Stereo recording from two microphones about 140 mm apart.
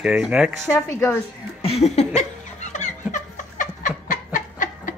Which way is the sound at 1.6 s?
45° left (ahead or behind).